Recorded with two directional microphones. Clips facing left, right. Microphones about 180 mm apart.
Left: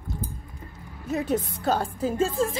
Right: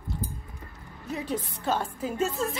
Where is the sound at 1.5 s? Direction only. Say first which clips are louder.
Left 3 dB; 40° left (ahead or behind).